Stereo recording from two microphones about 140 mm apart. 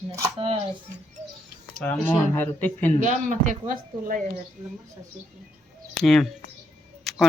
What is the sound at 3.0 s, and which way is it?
A man's voice, 65° right (ahead or behind).